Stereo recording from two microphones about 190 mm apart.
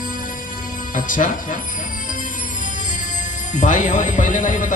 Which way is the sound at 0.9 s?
45° left (ahead or behind).